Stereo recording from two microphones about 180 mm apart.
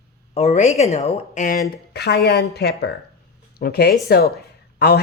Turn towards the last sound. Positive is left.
turn(degrees=60)  # may be behind; listen again after turning